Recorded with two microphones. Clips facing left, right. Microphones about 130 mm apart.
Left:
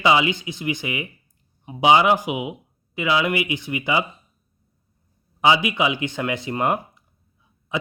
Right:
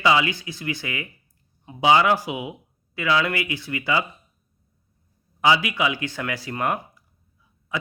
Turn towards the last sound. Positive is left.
turn(degrees=20)  # may be behind; listen again after turning